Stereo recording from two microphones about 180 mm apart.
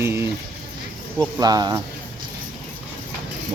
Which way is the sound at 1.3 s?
20° right (ahead or behind).